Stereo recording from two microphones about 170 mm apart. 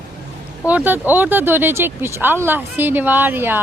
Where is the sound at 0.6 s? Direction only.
10° right (ahead or behind).